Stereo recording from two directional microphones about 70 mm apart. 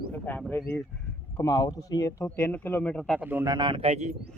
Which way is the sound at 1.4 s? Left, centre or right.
Left.